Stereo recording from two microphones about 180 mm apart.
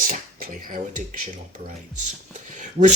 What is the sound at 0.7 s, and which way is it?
Speech, 45° right (ahead or behind).